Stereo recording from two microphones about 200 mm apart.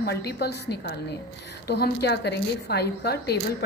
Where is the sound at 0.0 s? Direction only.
55° left (ahead or behind).